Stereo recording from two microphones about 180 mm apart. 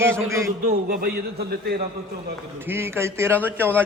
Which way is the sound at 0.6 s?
50° right (ahead or behind).